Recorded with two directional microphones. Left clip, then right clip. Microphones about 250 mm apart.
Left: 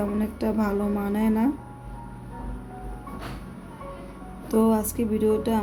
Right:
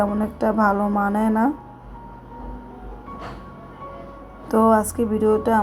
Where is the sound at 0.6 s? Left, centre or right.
Centre.